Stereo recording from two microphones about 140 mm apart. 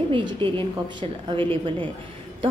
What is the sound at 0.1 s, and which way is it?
A woman's voice, 35° right (ahead or behind).